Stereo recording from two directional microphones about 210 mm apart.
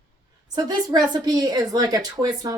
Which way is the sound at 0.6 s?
20° right (ahead or behind).